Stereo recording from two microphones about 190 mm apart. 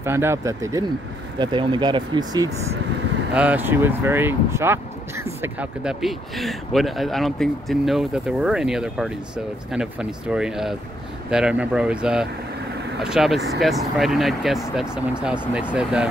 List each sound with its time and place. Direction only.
0.0 s speech: 15° right (ahead or behind)
3.3 s speech: 10° right (ahead or behind)